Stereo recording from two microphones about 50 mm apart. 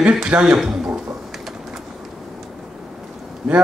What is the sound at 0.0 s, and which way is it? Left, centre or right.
Speech, centre.